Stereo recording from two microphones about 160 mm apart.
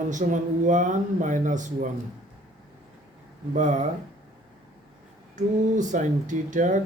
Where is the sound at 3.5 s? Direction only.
50° right (ahead or behind).